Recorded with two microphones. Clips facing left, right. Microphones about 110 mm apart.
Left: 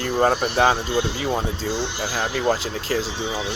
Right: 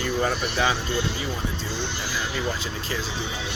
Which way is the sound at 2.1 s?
60° left (ahead or behind).